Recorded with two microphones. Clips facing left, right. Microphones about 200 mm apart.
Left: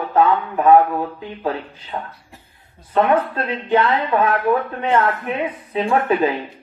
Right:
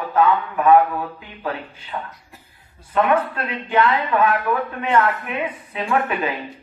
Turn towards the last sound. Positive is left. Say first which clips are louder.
# left 4 dB
turn(degrees=30)  # may be behind; listen again after turning